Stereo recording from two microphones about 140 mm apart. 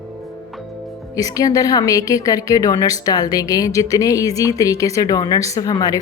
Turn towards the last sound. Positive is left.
turn(degrees=25)  # may be behind; listen again after turning